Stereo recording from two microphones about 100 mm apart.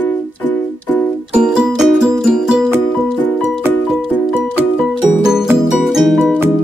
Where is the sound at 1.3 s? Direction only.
10° right (ahead or behind).